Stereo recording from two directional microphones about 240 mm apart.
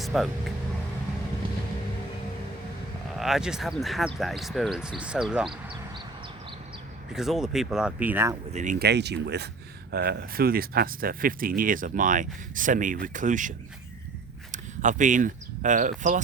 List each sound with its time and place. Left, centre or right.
0.0 s speech: centre
3.2 s speech: centre
7.1 s speech: centre
8.5 s speech: right
14.5 s speech: right